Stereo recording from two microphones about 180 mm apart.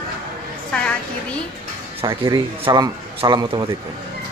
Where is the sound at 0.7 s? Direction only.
5° left (ahead or behind).